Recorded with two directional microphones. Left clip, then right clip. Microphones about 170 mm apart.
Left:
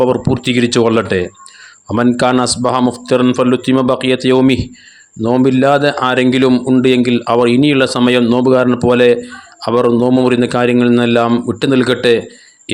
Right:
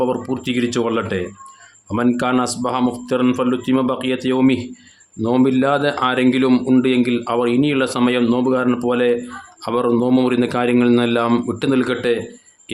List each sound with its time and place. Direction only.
0.0 s speech: 30° left (ahead or behind)
6.5 s a man's voice: 15° left (ahead or behind)
6.8 s speech: 25° left (ahead or behind)